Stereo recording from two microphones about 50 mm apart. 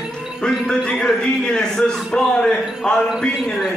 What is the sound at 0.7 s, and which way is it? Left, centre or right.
Speech, centre.